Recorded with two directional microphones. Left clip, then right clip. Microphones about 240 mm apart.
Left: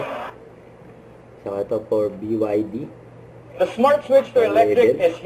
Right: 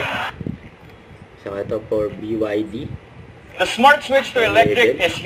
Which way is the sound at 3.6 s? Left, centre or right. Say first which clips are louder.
Right 4 dB; centre.